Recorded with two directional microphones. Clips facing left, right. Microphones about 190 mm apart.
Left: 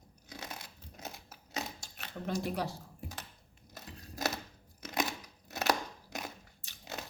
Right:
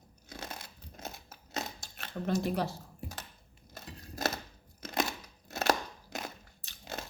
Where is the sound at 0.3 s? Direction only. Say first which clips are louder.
Right 2 dB; 15° left (ahead or behind).